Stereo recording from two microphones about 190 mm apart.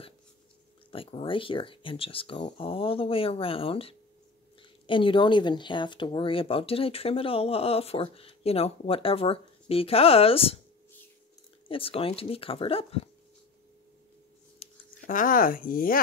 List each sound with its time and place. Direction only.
0.9 s speech: 30° left (ahead or behind)
11.6 s speech: 30° left (ahead or behind)
14.6 s speech: 40° left (ahead or behind)